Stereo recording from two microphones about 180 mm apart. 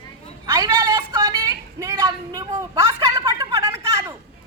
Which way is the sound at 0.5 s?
15° right (ahead or behind).